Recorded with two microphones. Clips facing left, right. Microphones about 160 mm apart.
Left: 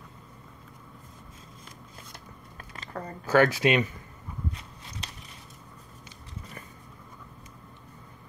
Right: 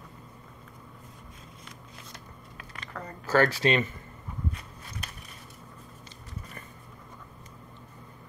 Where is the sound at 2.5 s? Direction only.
30° left (ahead or behind).